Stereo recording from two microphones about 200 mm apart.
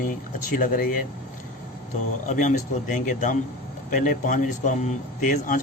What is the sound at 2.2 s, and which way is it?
Speech, 40° left (ahead or behind).